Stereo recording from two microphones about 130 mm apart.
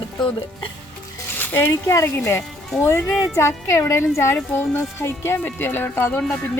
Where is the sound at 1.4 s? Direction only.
15° left (ahead or behind).